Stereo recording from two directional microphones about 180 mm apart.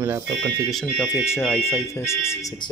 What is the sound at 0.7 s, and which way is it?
Speech, 5° left (ahead or behind).